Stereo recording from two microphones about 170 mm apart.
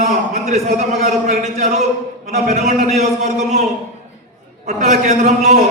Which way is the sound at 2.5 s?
40° right (ahead or behind).